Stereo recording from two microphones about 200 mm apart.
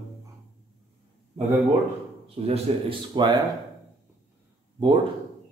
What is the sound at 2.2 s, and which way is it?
Speech, 30° right (ahead or behind).